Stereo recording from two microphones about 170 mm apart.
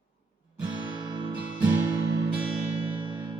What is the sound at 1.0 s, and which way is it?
Music, 25° right (ahead or behind).